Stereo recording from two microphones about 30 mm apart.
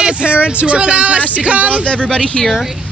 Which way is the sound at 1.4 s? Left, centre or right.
Right.